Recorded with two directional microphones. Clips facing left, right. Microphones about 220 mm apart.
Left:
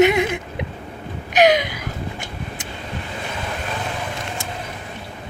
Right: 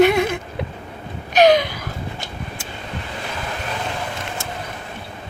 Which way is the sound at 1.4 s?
20° left (ahead or behind).